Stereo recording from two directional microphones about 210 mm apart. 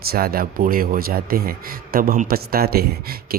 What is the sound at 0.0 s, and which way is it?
A man's voice, 45° right (ahead or behind).